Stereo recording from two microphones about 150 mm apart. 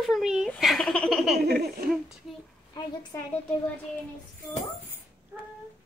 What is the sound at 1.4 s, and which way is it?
Speech, 90° right.